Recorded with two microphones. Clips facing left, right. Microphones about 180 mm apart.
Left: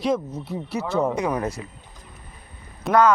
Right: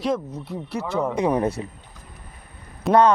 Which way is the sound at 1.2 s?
30° right (ahead or behind).